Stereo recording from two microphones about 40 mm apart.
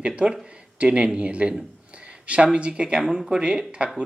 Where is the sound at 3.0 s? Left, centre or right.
Centre.